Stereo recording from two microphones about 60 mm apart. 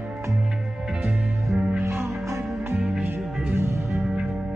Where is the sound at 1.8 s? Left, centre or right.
Right.